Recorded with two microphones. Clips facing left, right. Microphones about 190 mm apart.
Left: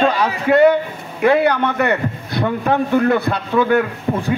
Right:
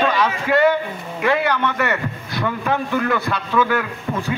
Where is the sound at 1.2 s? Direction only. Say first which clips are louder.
Left 5 dB; 55° left (ahead or behind).